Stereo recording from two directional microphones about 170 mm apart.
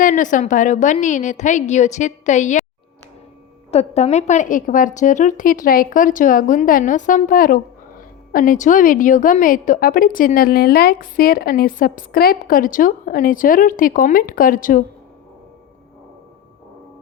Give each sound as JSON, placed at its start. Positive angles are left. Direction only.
{"t": 0.0, "sound": "a woman's voice", "side_deg": 50}
{"t": 3.7, "sound": "a woman's voice", "side_deg": 40}